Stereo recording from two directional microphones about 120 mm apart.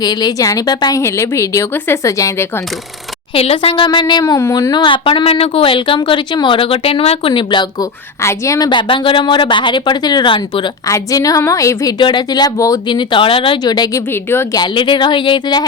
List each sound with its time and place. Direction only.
0.0 s speech: 35° left (ahead or behind)
3.3 s a woman's voice: 55° left (ahead or behind)
3.8 s a woman's voice: 35° left (ahead or behind)
4.7 s a woman's voice: 40° left (ahead or behind)
8.2 s a woman's voice: 25° left (ahead or behind); by 10.7 s 40° left (ahead or behind)
10.8 s speech: 30° left (ahead or behind)
11.9 s a woman's voice: 40° left (ahead or behind)
13.7 s a woman's voice: 35° left (ahead or behind)
14.1 s speech: 20° left (ahead or behind)
14.5 s a woman's voice: 40° left (ahead or behind)